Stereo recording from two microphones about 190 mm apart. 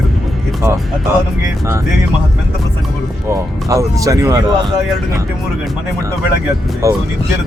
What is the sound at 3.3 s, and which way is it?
Speech, 15° right (ahead or behind).